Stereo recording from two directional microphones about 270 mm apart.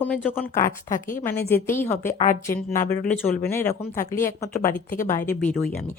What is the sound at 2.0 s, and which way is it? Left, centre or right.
Speech, left.